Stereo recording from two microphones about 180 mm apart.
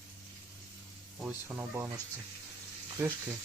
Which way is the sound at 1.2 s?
15° right (ahead or behind).